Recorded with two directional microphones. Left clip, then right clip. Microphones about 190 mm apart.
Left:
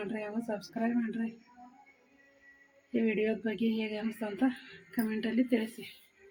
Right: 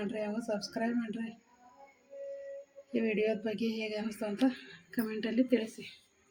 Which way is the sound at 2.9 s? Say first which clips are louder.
Even; 10° left (ahead or behind).